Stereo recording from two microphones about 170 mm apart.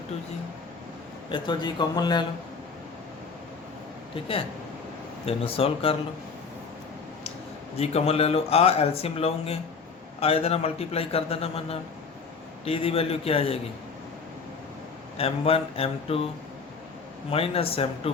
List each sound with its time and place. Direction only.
1.3 s speech: 25° left (ahead or behind)
4.1 s speech: 35° left (ahead or behind)
7.8 s speech: 35° left (ahead or behind)
15.2 s speech: 35° left (ahead or behind)
17.3 s speech: 35° left (ahead or behind)